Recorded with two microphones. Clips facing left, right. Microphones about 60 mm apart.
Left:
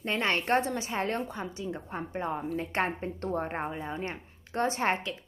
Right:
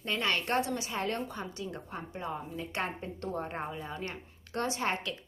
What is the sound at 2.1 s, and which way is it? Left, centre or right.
A woman's voice, left.